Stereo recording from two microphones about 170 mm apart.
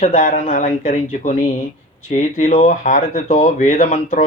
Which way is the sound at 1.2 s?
50° left (ahead or behind).